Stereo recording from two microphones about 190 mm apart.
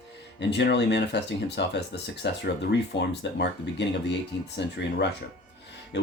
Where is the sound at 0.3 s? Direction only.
65° left (ahead or behind).